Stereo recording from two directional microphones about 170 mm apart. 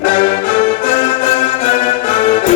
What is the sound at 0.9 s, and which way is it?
Music, 35° left (ahead or behind).